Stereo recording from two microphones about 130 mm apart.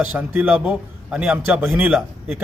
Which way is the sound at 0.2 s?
10° right (ahead or behind).